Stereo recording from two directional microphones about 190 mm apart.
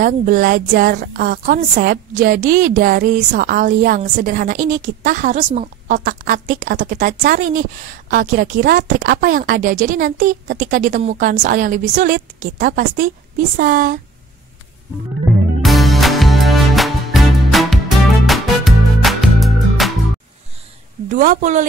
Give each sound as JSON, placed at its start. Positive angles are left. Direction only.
{"t": 0.0, "sound": "a woman's voice", "side_deg": -45}
{"t": 15.2, "sound": "music", "side_deg": 0}
{"t": 21.1, "sound": "a woman's voice", "side_deg": -45}